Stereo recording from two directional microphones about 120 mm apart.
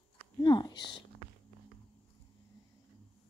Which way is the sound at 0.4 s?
40° left (ahead or behind).